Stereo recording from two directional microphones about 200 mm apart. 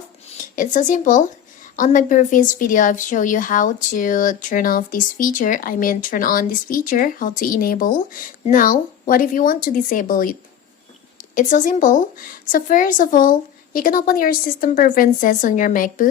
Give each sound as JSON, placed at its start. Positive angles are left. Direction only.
{"t": 0.3, "sound": "a woman's voice", "side_deg": 40}
{"t": 11.3, "sound": "a woman's voice", "side_deg": 40}